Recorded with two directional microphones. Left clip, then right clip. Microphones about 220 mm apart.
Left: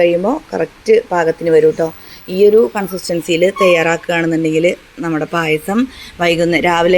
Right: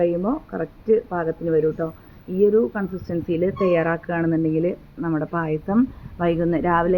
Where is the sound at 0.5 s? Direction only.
30° left (ahead or behind).